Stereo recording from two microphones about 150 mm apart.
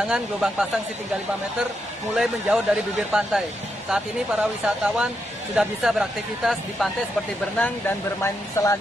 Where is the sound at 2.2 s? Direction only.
5° right (ahead or behind).